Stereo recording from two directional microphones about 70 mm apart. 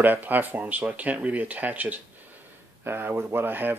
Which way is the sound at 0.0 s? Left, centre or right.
Right.